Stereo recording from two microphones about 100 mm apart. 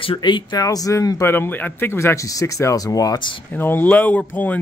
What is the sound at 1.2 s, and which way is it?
Speech, 20° left (ahead or behind).